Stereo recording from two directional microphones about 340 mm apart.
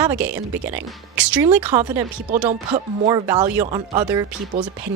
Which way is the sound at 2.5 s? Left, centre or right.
Centre.